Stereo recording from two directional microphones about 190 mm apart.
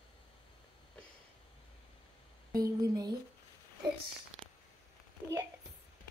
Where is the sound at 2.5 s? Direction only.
20° right (ahead or behind).